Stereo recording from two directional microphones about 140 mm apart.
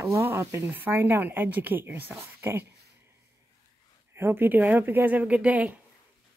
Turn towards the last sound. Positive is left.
turn(degrees=-10)  # may be behind; listen again after turning